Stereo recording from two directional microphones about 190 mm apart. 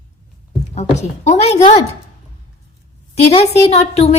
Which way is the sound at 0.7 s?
35° left (ahead or behind).